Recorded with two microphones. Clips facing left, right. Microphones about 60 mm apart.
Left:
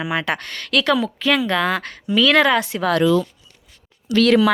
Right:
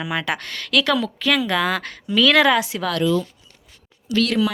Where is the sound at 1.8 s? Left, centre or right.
Centre.